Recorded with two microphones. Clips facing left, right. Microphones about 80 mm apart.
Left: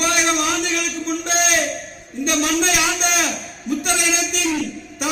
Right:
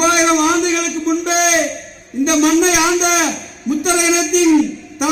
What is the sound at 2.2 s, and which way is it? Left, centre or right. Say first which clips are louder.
A man's voice: right 7 dB; centre.